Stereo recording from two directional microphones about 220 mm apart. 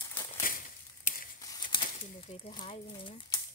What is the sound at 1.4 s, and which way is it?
Crumpling, 20° left (ahead or behind).